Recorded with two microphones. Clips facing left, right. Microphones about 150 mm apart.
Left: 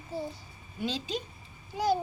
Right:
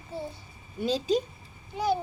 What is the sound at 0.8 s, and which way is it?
Speech, 40° right (ahead or behind).